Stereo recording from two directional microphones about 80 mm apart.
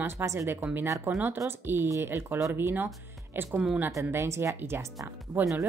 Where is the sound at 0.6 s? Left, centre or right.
Right.